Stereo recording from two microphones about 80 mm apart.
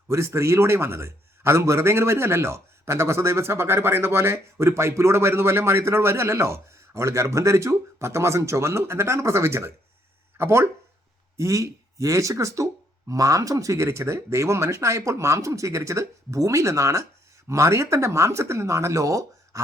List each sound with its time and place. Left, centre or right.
0.1 s a man's voice: right